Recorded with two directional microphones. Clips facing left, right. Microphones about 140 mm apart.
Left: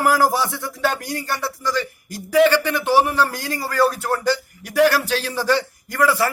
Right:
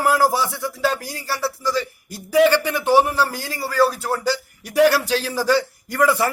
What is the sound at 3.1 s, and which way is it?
A man's voice, 5° right (ahead or behind).